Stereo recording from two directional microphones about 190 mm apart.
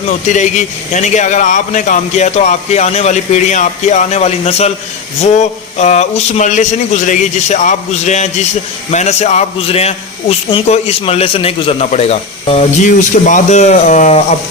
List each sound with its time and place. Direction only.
0.3 s a man's voice: 40° left (ahead or behind)